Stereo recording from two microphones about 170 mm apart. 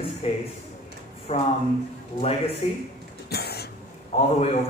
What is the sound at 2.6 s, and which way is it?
Speech, 40° left (ahead or behind).